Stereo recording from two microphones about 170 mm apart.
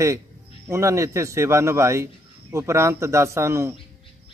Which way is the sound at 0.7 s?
15° right (ahead or behind).